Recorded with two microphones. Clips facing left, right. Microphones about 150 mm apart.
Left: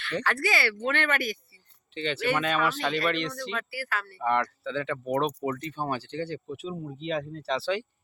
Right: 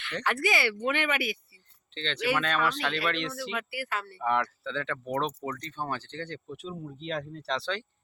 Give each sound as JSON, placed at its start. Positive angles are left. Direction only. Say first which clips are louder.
{"t": 0.3, "sound": "speech", "louder": "right 2 dB", "side_deg": -20}
{"t": 2.0, "sound": "speech", "louder": "left 2 dB", "side_deg": 10}
{"t": 3.6, "sound": "speech", "louder": "left 1 dB", "side_deg": -20}
{"t": 4.2, "sound": "speech", "louder": "left 2 dB", "side_deg": -5}